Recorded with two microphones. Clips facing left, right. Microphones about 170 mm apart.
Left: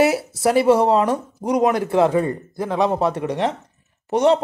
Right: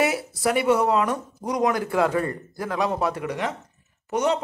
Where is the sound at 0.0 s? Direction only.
30° left (ahead or behind).